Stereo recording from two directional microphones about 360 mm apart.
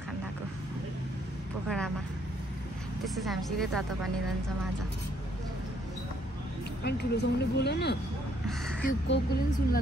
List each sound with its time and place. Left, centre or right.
3.2 s a woman's voice: centre
6.8 s speech: left